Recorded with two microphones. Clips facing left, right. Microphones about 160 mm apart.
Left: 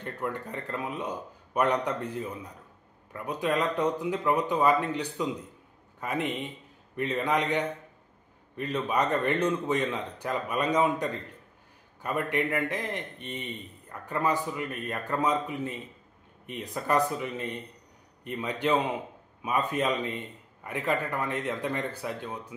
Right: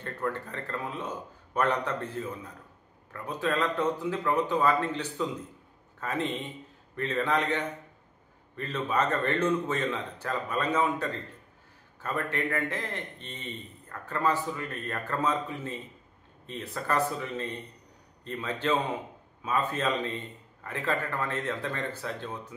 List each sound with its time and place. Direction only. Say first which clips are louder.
0.0 s a man's voice: even; 15° left (ahead or behind)